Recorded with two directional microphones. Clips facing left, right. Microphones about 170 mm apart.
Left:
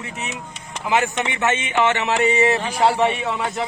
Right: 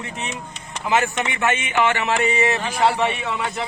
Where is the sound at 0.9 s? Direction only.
15° left (ahead or behind).